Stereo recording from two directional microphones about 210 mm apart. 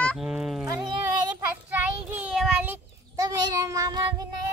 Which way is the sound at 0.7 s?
20° right (ahead or behind).